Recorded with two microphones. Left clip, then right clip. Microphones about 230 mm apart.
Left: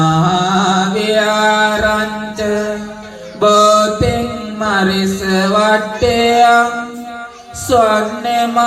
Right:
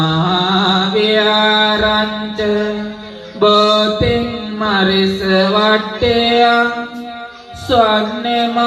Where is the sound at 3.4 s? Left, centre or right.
Left.